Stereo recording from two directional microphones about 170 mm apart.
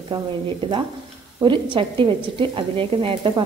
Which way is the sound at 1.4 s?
30° right (ahead or behind).